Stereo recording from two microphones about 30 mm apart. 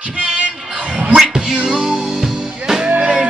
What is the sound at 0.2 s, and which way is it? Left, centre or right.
Music, right.